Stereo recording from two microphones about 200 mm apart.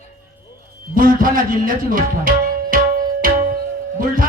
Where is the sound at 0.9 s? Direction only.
45° right (ahead or behind).